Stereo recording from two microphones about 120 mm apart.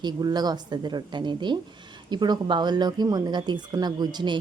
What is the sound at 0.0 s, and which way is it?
A woman's voice, 35° right (ahead or behind).